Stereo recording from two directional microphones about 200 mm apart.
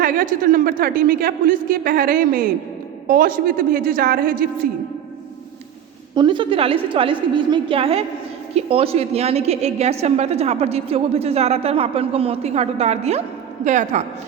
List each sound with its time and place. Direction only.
0.0 s a man's voice: 45° right (ahead or behind)
6.1 s a woman's voice: 25° right (ahead or behind)